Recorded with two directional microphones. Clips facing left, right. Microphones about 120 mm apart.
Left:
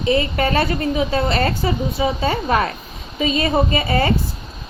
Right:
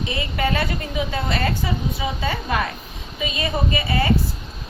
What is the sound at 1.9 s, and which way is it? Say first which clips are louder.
Speech: left 6 dB; 30° left (ahead or behind).